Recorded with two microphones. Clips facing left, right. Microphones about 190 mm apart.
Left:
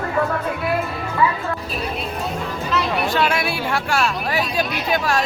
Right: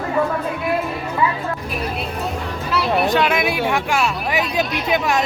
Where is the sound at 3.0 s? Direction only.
15° right (ahead or behind).